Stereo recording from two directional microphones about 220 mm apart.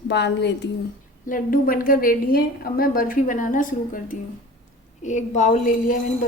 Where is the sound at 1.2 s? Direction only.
40° left (ahead or behind).